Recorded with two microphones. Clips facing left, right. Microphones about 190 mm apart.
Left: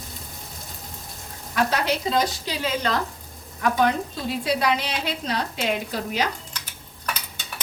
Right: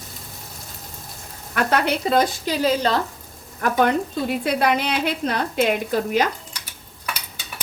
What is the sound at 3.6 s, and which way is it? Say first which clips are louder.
Speech: right 2 dB; 55° right (ahead or behind).